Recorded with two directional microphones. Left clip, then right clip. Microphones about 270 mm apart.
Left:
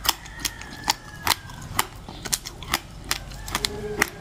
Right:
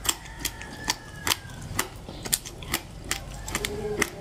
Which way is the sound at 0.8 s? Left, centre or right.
Left.